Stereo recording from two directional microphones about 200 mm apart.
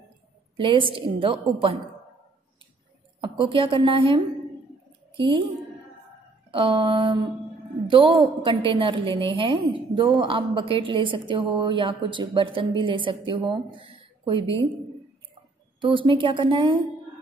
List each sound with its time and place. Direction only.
0.6 s a woman's voice: 25° right (ahead or behind)
3.2 s a woman's voice: 25° right (ahead or behind)
6.5 s a woman's voice: 25° right (ahead or behind)
15.8 s a woman's voice: 25° right (ahead or behind)